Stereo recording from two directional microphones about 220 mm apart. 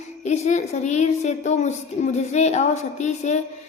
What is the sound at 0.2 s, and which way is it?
A woman's voice, 30° left (ahead or behind).